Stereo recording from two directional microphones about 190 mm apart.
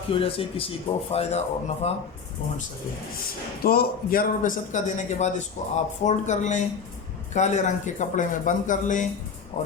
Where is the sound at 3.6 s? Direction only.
50° left (ahead or behind).